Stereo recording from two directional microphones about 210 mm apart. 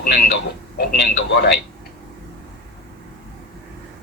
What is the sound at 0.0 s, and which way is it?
A man's voice, 45° left (ahead or behind).